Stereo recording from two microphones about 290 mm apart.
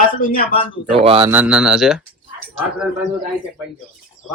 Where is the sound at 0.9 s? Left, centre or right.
Centre.